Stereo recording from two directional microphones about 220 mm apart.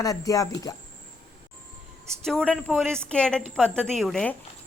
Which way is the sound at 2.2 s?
5° left (ahead or behind).